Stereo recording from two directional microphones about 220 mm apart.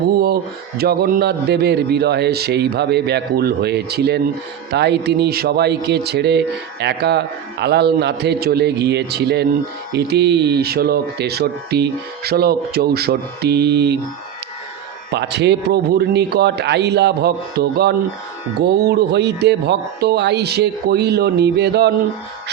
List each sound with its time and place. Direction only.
0.8 s speech: 45° right (ahead or behind)
15.1 s speech: 50° right (ahead or behind)